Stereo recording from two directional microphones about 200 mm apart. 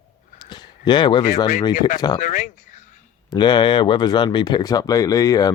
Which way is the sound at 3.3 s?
20° left (ahead or behind).